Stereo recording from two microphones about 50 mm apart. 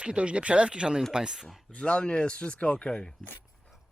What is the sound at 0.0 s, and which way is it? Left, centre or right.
Speech, right.